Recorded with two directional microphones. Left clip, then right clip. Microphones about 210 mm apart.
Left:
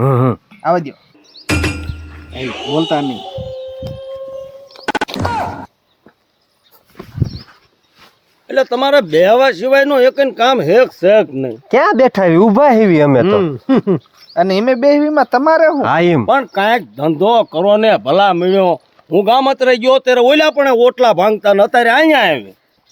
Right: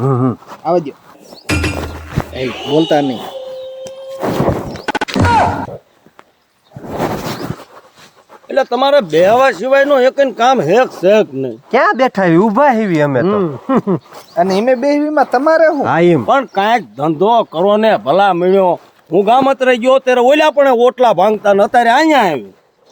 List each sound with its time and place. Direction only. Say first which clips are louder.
0.0 s a sound: left 2 dB; 55° left (ahead or behind)
0.6 s speech: even; 20° left (ahead or behind)
1.5 s music: even; centre (ahead or behind)
2.3 s a sound: right 3 dB; centre (ahead or behind)
5.1 s whack: right 7 dB; centre (ahead or behind)
8.4 s speech: right 1 dB; 20° left (ahead or behind)
11.7 s speech: left 1 dB; 40° left (ahead or behind)
14.3 s speech: right 1 dB; 25° left (ahead or behind)
15.7 s speech: right 1 dB; 45° left (ahead or behind)
16.2 s speech: even; 20° left (ahead or behind)